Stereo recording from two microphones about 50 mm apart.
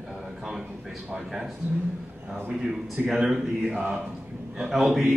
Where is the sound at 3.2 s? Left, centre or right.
Centre.